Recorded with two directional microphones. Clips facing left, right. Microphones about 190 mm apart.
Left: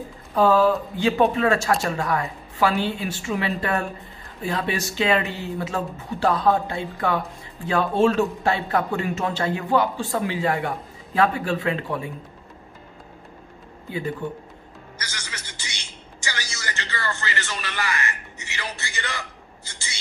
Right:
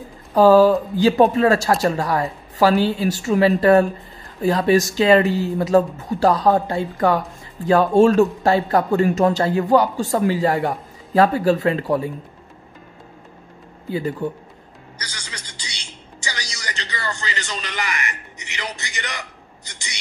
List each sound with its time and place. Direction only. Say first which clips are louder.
0.3 s speech: right 6 dB; 35° right (ahead or behind)
13.8 s speech: right 5 dB; 35° right (ahead or behind)
16.3 s a sound: even; 15° right (ahead or behind)